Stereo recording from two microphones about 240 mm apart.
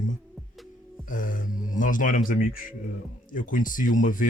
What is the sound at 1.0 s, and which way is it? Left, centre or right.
Speech, left.